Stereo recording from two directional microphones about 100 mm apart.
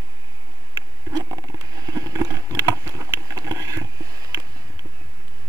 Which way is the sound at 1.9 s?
35° right (ahead or behind).